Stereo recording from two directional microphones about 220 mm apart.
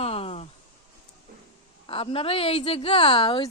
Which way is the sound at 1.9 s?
25° left (ahead or behind).